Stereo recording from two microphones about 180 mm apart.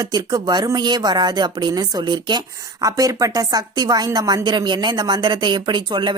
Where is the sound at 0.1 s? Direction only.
20° right (ahead or behind).